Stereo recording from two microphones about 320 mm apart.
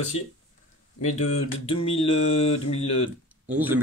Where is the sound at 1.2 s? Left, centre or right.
Left.